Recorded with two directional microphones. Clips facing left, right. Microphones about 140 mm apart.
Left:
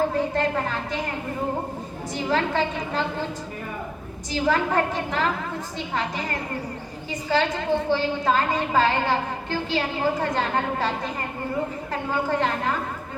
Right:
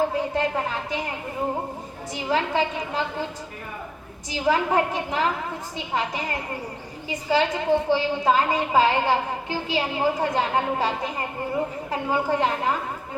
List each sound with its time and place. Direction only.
0.1 s a woman's voice: 10° right (ahead or behind)
2.1 s a woman's voice: 10° right (ahead or behind)
4.3 s a woman's voice: 10° right (ahead or behind)